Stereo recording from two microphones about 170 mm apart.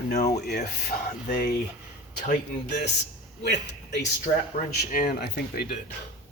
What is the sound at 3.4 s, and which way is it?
Speech, 85° left.